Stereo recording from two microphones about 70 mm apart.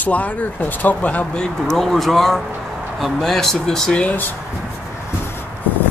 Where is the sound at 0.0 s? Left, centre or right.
Left.